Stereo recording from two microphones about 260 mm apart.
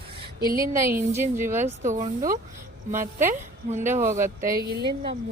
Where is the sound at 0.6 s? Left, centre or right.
Centre.